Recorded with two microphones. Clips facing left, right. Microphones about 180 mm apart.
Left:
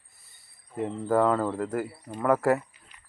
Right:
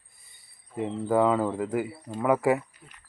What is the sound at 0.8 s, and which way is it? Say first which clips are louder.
Speech: even; centre (ahead or behind).